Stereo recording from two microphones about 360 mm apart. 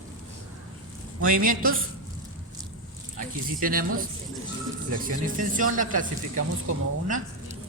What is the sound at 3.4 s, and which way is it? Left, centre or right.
Speech, right.